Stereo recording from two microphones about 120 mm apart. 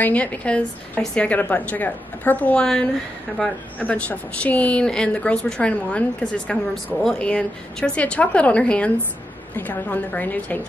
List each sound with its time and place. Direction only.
0.0 s a woman's voice: 10° left (ahead or behind)